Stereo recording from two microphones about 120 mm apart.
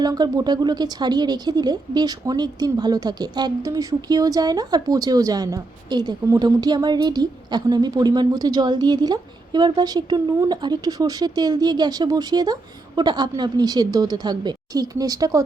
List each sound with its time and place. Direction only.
0.0 s speech: 30° right (ahead or behind)